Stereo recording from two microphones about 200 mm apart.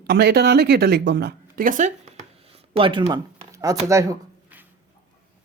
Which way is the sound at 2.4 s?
30° right (ahead or behind).